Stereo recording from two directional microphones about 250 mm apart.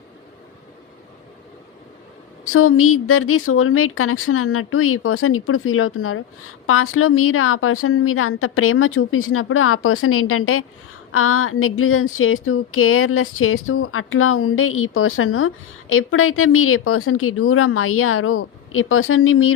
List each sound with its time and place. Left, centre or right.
2.4 s speech: left